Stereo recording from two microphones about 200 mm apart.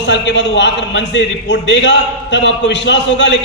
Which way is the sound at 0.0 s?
60° left (ahead or behind).